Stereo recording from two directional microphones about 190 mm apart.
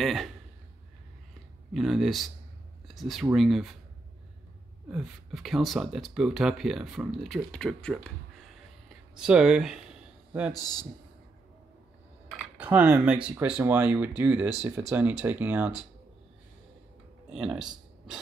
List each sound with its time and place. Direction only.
0.0 s speech: centre (ahead or behind)
1.7 s speech: centre (ahead or behind)
4.9 s speech: centre (ahead or behind)
9.1 s speech: 5° right (ahead or behind)
10.5 s a man's voice: 20° left (ahead or behind)
12.5 s speech: 10° right (ahead or behind)
17.3 s speech: 5° right (ahead or behind)